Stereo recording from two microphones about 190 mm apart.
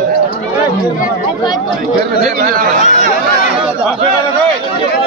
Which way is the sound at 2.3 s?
45° right (ahead or behind).